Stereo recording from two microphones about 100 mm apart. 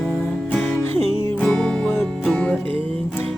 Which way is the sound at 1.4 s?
5° left (ahead or behind).